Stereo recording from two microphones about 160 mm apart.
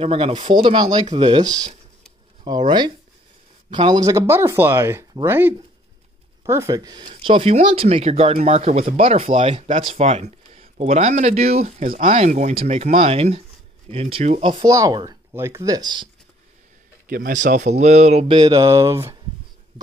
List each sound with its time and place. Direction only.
0.0 s speech: 35° right (ahead or behind)
1.1 s mantra: 30° right (ahead or behind)
3.7 s speech: 25° right (ahead or behind)
11.8 s speech: 55° right (ahead or behind)
14.4 s speech: 30° right (ahead or behind)
14.7 s mantra: 20° right (ahead or behind)
17.1 s speech: 60° right (ahead or behind); by 18.4 s 40° right (ahead or behind)
18.4 s mantra: 20° right (ahead or behind)